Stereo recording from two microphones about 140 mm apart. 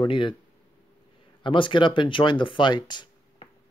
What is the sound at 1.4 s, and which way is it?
Speech, 35° left (ahead or behind).